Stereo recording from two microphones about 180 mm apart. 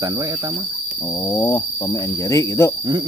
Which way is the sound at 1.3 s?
15° left (ahead or behind).